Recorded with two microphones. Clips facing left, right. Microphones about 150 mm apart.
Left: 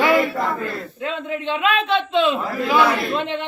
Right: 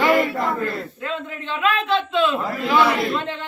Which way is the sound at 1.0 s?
20° left (ahead or behind).